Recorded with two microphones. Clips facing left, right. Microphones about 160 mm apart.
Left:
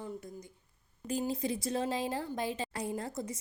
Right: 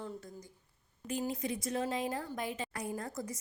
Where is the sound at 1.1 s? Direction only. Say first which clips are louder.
Left 2 dB; 35° left (ahead or behind).